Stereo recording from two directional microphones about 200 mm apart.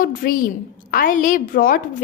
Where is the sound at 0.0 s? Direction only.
45° left (ahead or behind).